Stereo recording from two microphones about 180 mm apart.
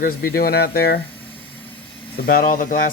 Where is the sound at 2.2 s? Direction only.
50° left (ahead or behind).